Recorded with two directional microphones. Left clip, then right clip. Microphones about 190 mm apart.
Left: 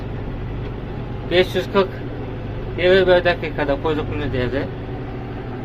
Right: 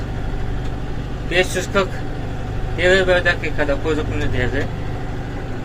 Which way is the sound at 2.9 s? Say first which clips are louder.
Left 4 dB; 20° left (ahead or behind).